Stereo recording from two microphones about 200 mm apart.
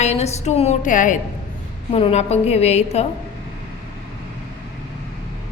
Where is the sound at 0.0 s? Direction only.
35° left (ahead or behind).